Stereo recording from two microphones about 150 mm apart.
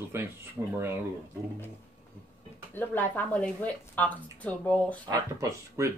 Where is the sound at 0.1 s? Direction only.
15° right (ahead or behind).